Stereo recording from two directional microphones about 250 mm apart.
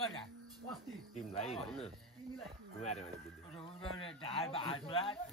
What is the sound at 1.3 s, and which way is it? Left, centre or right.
Speech, left.